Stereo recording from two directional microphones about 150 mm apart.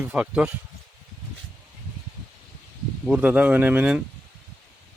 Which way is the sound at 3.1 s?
10° right (ahead or behind).